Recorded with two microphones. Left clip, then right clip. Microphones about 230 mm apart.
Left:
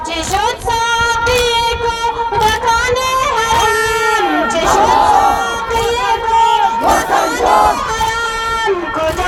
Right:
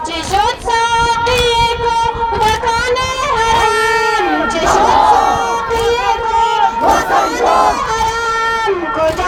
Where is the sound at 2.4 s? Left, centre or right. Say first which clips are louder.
Left 2 dB; left.